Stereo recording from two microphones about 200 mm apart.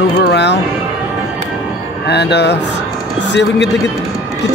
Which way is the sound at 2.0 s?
55° left (ahead or behind).